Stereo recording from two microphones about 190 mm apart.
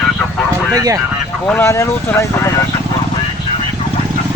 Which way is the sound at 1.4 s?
10° left (ahead or behind).